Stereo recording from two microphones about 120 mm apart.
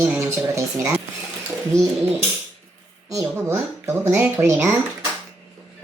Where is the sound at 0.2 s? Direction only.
20° right (ahead or behind).